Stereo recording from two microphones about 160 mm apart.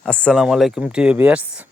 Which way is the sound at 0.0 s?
5° left (ahead or behind).